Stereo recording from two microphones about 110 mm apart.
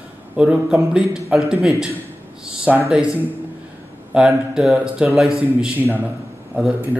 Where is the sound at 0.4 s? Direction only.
5° right (ahead or behind).